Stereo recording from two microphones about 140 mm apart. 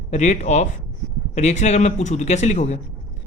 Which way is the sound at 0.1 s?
55° left (ahead or behind).